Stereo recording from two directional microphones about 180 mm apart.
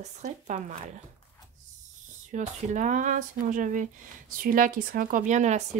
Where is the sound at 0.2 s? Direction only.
40° right (ahead or behind).